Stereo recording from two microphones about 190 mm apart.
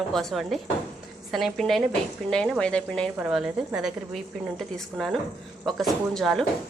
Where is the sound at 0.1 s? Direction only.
Centre (ahead or behind).